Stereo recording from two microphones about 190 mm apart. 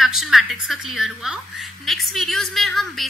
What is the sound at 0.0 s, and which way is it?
A woman's voice, centre (ahead or behind).